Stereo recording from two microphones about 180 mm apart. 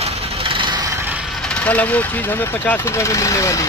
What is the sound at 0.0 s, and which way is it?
Vehicle, 30° right (ahead or behind).